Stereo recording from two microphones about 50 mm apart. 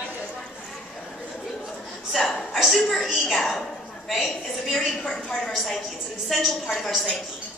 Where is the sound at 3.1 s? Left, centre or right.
Centre.